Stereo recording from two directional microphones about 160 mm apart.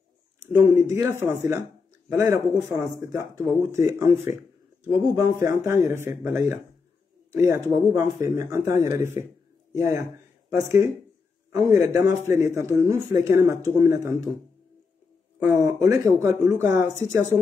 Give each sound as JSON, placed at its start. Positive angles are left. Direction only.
{"t": 0.7, "sound": "speech", "side_deg": -15}
{"t": 11.5, "sound": "speech", "side_deg": -20}
{"t": 15.3, "sound": "speech", "side_deg": -15}